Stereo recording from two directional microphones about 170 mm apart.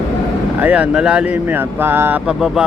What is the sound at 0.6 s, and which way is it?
Speech, 5° right (ahead or behind).